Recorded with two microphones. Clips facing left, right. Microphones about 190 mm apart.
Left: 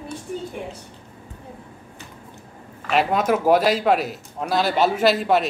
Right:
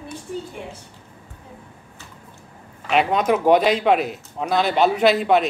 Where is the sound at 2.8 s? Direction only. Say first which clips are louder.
Right 1 dB; centre (ahead or behind).